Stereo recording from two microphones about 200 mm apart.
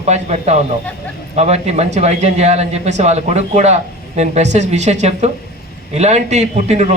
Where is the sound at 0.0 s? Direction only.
35° right (ahead or behind).